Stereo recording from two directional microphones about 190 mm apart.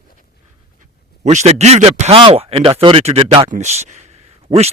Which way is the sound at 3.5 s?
35° right (ahead or behind).